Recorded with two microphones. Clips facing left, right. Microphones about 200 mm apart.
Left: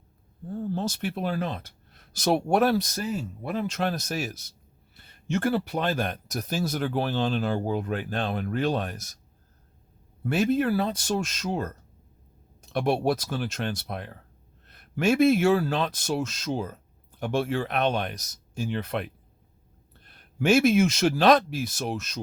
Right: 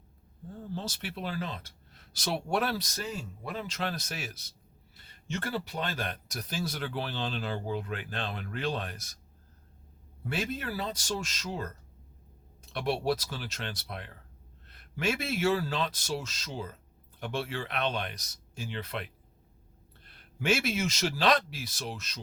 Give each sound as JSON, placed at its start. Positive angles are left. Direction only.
{"t": 0.7, "sound": "speech", "side_deg": 50}
{"t": 10.2, "sound": "speech", "side_deg": 55}
{"t": 12.7, "sound": "speech", "side_deg": 50}
{"t": 20.1, "sound": "speech", "side_deg": 45}